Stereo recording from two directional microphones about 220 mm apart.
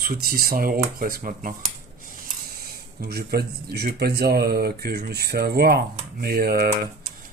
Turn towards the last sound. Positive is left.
turn(degrees=-45)  # may be behind; listen again after turning